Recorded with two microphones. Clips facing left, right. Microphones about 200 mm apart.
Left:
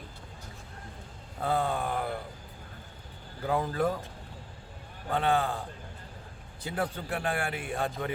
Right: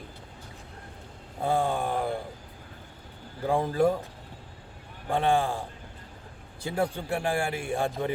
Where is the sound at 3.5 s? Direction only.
25° right (ahead or behind).